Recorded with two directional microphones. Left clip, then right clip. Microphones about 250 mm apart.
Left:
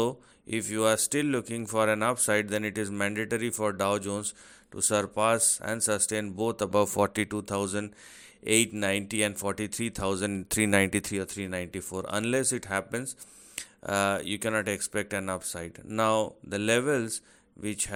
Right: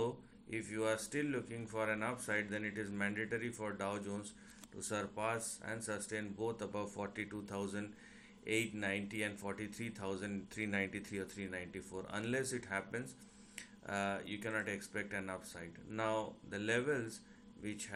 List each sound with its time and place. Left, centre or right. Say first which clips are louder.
0.5 s speech: left 12 dB; left